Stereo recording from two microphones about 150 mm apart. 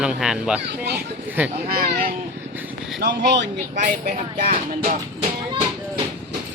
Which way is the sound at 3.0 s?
90° right.